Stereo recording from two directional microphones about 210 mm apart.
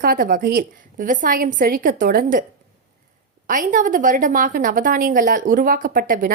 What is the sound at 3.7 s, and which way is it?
A woman's voice, 40° right (ahead or behind).